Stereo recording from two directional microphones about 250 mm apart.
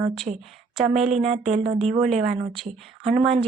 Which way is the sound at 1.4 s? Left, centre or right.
Right.